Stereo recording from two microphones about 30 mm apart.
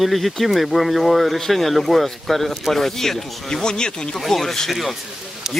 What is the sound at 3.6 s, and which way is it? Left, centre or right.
Speech, left.